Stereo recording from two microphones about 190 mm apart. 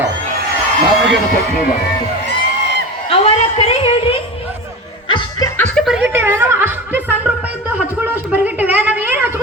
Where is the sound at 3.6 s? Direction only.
30° left (ahead or behind).